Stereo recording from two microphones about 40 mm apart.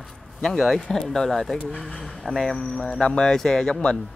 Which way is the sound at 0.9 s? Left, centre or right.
Centre.